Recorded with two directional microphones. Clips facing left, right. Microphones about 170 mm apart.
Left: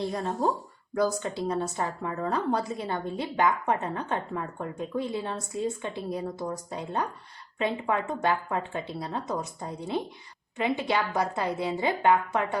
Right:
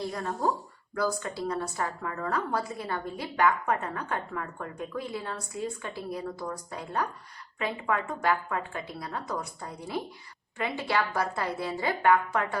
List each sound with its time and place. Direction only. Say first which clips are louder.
0.1 s a woman's voice: left 2 dB; 25° left (ahead or behind)